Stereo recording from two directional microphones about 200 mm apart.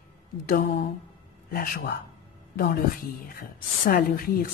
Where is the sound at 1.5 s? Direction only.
45° left (ahead or behind).